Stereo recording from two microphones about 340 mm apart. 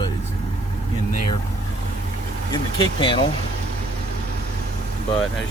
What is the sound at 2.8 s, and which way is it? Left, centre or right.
Speech, centre.